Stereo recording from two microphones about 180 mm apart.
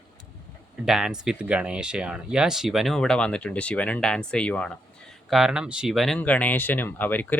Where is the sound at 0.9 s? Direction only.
5° right (ahead or behind).